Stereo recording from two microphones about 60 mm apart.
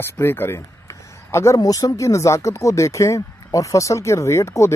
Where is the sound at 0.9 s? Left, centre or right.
Left.